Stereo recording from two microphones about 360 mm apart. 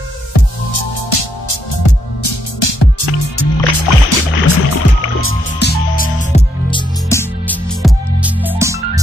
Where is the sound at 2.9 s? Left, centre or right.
Left.